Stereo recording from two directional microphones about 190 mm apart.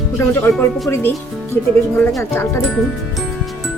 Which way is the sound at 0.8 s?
15° left (ahead or behind).